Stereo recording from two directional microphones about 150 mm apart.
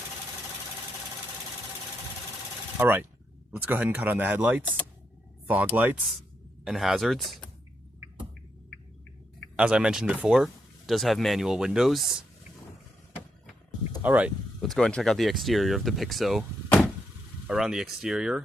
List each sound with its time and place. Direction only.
2.7 s speech: 15° right (ahead or behind); by 7.5 s centre (ahead or behind)
9.6 s speech: 5° right (ahead or behind)
14.0 s speech: 10° right (ahead or behind)
14.6 s speech: 5° left (ahead or behind)
17.4 s speech: 5° right (ahead or behind)